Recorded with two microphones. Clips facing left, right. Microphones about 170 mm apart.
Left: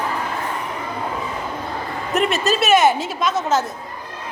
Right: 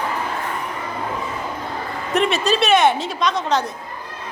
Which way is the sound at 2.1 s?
Centre (ahead or behind).